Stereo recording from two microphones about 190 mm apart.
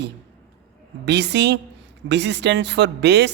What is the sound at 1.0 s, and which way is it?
Speech, 60° right (ahead or behind).